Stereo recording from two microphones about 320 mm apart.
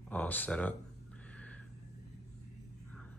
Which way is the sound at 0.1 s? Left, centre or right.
Centre.